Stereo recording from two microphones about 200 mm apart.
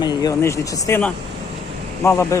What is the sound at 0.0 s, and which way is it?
A man's voice, 20° left (ahead or behind).